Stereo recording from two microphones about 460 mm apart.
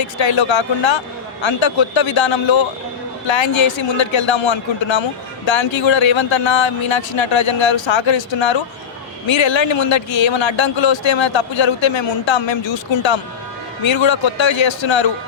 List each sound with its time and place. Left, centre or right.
0.0 s speech: left